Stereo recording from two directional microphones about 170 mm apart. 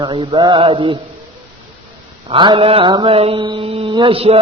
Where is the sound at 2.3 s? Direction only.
30° right (ahead or behind).